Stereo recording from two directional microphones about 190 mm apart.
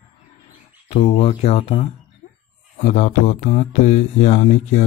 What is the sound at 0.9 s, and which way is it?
Speech, 30° left (ahead or behind).